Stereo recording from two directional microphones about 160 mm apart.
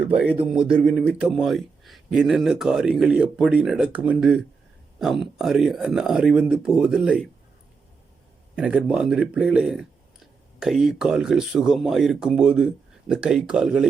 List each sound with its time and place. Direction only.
0.2 s speech: 5° right (ahead or behind)
8.5 s speech: 5° right (ahead or behind)